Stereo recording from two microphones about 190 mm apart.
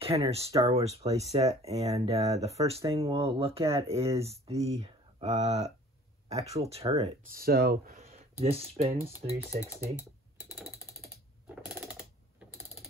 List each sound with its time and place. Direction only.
0.0 s speech: 30° right (ahead or behind)
7.3 s speech: 55° right (ahead or behind)
8.0 s speech: 35° right (ahead or behind)
11.4 s a sound: 5° right (ahead or behind)
11.8 s typewriter: 5° right (ahead or behind)